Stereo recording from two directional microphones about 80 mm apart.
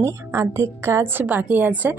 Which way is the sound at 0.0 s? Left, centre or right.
Right.